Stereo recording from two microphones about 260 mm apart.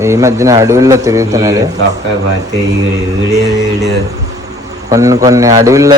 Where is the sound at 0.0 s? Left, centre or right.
Centre.